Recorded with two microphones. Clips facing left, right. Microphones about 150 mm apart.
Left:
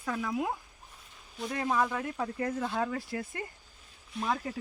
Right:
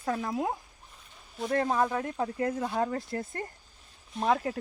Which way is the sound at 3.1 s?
45° right (ahead or behind).